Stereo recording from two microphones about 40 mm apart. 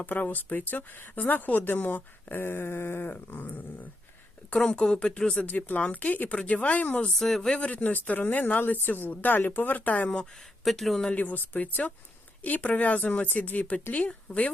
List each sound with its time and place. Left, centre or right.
0.0 s speech: left
2.4 s a sound: left
3.1 s speech: left
4.7 s speech: left
5.6 s speech: left
7.2 s speech: centre
7.6 s speech: left
8.6 s speech: left
10.6 s speech: centre
11.1 s speech: left